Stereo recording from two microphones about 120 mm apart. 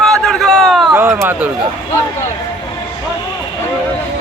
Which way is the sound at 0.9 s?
20° right (ahead or behind).